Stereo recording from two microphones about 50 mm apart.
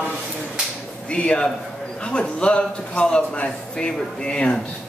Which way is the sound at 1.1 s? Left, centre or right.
Left.